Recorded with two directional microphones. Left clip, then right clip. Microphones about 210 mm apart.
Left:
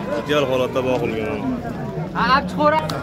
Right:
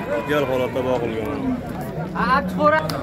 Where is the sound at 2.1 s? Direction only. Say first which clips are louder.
Left 2 dB; 45° left (ahead or behind).